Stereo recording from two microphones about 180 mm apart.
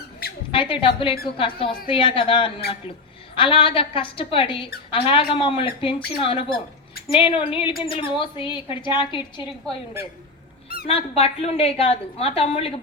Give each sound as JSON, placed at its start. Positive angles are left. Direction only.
{"t": 0.5, "sound": "a woman's voice", "side_deg": 30}
{"t": 10.8, "sound": "a woman's voice", "side_deg": 35}